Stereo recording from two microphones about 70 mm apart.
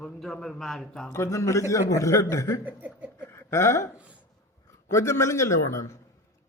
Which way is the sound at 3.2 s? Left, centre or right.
Left.